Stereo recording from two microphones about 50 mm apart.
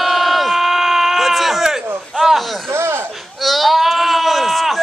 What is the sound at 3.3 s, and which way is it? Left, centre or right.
Sheep, centre.